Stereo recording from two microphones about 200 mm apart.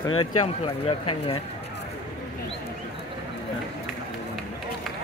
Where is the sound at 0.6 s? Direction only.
30° left (ahead or behind).